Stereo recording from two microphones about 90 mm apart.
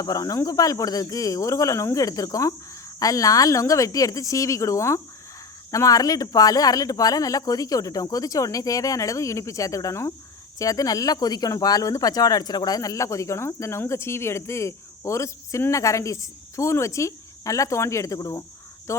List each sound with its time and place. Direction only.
0.0 s speech: 40° left (ahead or behind)